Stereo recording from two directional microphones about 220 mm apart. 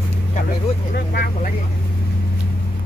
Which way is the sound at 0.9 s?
45° left (ahead or behind).